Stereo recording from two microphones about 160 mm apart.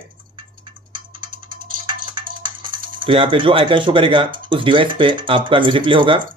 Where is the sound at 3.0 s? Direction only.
30° right (ahead or behind).